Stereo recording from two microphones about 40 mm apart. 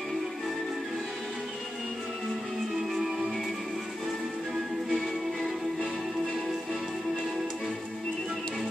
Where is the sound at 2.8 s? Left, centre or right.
Centre.